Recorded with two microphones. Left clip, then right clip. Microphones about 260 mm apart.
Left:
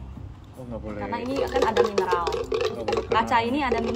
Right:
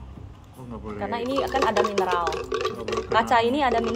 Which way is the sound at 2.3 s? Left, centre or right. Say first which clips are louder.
Left 1 dB; centre.